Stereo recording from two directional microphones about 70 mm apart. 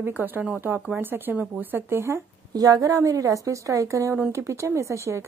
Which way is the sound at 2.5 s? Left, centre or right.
Right.